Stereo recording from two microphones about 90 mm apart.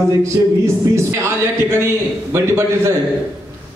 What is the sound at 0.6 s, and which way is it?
A man's voice, 30° right (ahead or behind).